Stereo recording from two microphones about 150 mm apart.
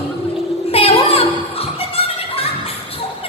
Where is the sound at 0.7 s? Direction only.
40° left (ahead or behind).